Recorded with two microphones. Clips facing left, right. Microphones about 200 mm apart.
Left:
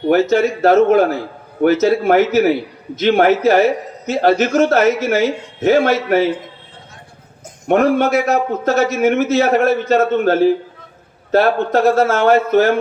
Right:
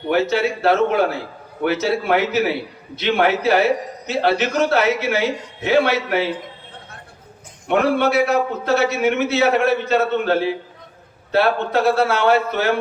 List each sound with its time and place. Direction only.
0.1 s a man's voice: 45° left (ahead or behind)
7.7 s a man's voice: 45° left (ahead or behind)